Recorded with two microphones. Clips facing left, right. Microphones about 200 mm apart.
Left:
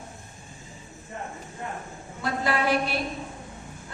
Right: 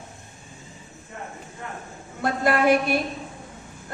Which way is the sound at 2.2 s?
50° right (ahead or behind).